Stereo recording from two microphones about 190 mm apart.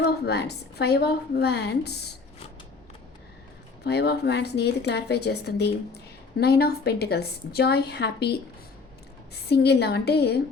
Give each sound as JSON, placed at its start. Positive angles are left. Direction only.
{"t": 0.0, "sound": "a woman's voice", "side_deg": 60}
{"t": 3.8, "sound": "a woman's voice", "side_deg": 60}
{"t": 9.5, "sound": "a woman's voice", "side_deg": 60}